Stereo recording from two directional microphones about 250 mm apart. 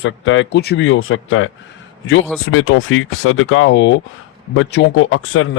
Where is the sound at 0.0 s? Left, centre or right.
Left.